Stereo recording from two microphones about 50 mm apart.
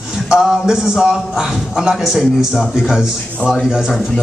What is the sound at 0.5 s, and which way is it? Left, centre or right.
A man's voice, centre.